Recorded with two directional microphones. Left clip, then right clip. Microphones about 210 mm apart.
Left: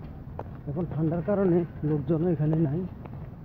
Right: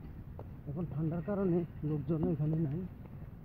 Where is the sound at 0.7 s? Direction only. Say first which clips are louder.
Left 10 dB; 5° right (ahead or behind).